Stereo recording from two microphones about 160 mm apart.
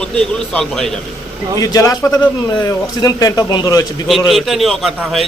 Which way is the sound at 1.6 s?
20° left (ahead or behind).